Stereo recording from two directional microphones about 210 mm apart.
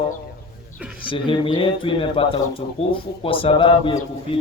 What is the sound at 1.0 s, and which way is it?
Speech, 25° left (ahead or behind).